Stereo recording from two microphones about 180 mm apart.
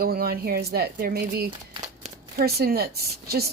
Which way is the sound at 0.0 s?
55° right (ahead or behind).